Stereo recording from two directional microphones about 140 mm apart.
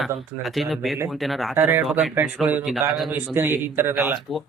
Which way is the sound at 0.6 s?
Centre (ahead or behind).